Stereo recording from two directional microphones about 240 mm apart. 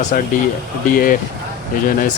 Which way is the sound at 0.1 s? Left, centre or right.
Left.